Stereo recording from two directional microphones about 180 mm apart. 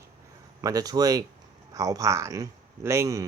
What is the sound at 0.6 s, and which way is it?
Speech, 20° right (ahead or behind).